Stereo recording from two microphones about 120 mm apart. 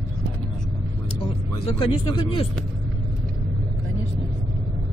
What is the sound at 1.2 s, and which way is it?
Speech, 40° left (ahead or behind).